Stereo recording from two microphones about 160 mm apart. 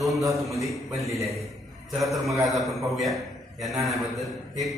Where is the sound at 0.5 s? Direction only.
20° right (ahead or behind).